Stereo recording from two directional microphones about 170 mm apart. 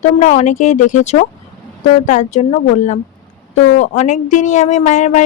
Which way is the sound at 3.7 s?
45° left (ahead or behind).